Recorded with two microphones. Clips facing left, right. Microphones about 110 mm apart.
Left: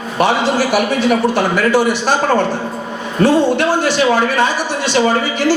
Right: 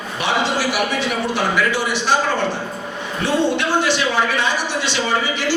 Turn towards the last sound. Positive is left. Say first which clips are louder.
# left 6 dB
turn(degrees=45)  # may be behind; listen again after turning